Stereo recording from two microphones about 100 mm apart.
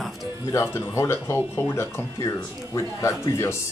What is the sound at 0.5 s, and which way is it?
Speech, 30° left (ahead or behind).